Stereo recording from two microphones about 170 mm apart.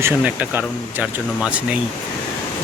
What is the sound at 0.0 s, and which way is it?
Speech, 10° right (ahead or behind).